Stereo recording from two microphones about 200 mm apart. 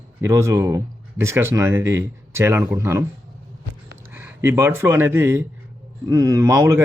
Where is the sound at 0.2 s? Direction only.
15° right (ahead or behind).